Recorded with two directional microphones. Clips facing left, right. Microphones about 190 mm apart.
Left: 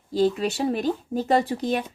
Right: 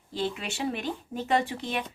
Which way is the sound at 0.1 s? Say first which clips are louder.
Left 10 dB; 40° left (ahead or behind).